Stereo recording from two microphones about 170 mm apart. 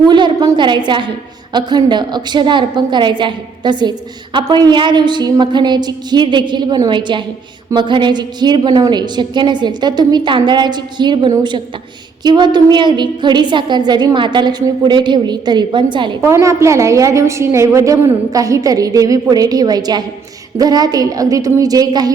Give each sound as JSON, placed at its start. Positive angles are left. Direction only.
{"t": 0.1, "sound": "a woman's voice", "side_deg": -25}
{"t": 16.2, "sound": "a woman's voice", "side_deg": -15}